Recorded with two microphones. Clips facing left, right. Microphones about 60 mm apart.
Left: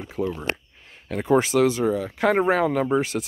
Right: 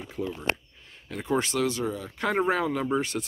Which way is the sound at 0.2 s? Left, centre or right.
Left.